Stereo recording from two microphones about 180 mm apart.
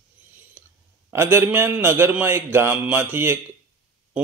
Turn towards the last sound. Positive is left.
turn(degrees=-10)  # may be behind; listen again after turning